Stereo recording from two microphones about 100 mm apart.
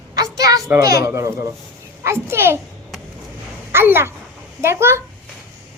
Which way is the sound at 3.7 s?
25° right (ahead or behind).